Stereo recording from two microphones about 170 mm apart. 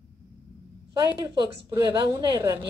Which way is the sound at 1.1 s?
30° right (ahead or behind).